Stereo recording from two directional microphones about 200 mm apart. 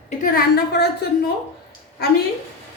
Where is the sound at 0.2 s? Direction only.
50° left (ahead or behind).